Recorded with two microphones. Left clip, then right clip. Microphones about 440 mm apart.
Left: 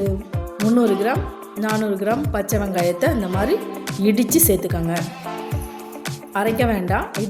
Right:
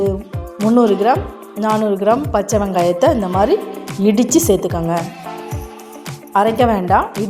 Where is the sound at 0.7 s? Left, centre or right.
Left.